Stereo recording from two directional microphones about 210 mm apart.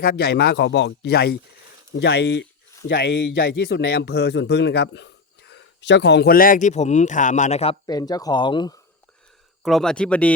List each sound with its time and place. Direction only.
0.0 s speech: 50° left (ahead or behind); by 8.8 s 20° left (ahead or behind)
9.6 s speech: centre (ahead or behind)